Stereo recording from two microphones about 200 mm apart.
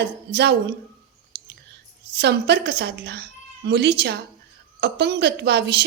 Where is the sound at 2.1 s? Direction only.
55° right (ahead or behind).